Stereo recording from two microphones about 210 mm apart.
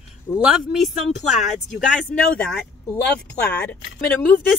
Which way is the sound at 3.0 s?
50° left (ahead or behind).